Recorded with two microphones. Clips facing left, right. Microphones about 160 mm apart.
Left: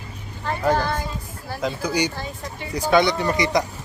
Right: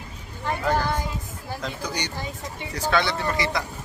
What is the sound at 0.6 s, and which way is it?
Speech, 15° left (ahead or behind).